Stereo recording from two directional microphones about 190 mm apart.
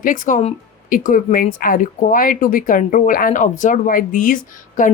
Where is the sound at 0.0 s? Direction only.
45° left (ahead or behind).